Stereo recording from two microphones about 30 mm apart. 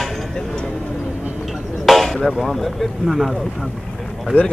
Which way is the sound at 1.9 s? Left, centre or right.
Centre.